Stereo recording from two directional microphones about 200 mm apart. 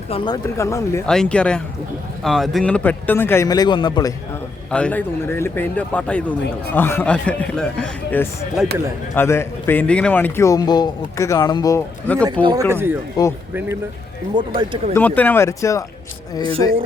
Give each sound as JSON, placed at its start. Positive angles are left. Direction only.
{"t": 0.1, "sound": "speech", "side_deg": 25}
{"t": 1.0, "sound": "speech", "side_deg": 5}
{"t": 4.7, "sound": "speech", "side_deg": 5}
{"t": 12.2, "sound": "speech", "side_deg": -20}
{"t": 14.3, "sound": "speech", "side_deg": -25}
{"t": 14.9, "sound": "speech", "side_deg": 10}
{"t": 16.4, "sound": "speech", "side_deg": -25}